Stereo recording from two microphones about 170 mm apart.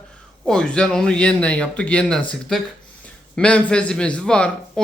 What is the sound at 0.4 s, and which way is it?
A man's voice, 5° left (ahead or behind).